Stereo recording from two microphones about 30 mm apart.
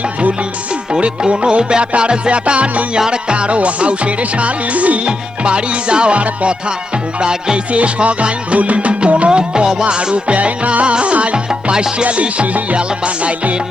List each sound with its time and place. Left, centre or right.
1.3 s music: right
3.1 s music: right
5.0 s music: right
7.2 s music: right
7.7 s music: right
9.4 s music: right
10.3 s music: right
11.7 s music: right
12.0 s music: right